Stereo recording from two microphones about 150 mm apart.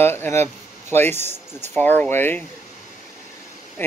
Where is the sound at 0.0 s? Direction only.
15° left (ahead or behind).